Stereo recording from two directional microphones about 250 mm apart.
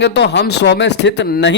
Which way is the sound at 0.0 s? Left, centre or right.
Left.